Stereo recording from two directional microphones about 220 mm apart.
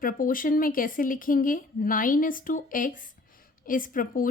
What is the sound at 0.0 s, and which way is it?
A woman's voice, 40° left (ahead or behind).